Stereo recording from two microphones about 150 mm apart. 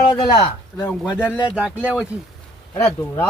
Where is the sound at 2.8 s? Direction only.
20° left (ahead or behind).